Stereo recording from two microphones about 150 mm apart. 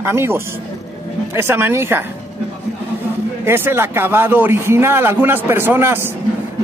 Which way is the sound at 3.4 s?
15° right (ahead or behind).